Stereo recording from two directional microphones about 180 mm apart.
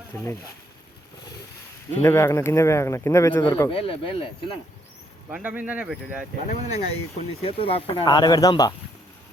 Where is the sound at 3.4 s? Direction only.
25° left (ahead or behind).